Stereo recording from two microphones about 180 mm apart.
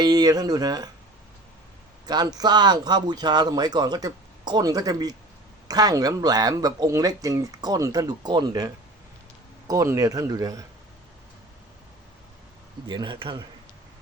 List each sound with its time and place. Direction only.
0.0 s a man's voice: 20° right (ahead or behind)
2.0 s a man's voice: 20° right (ahead or behind)
12.9 s a man's voice: 25° right (ahead or behind)